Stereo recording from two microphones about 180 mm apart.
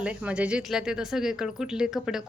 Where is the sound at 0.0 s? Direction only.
5° right (ahead or behind).